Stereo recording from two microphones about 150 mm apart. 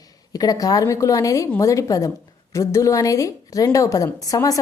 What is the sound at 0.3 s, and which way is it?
A woman's voice, 25° left (ahead or behind).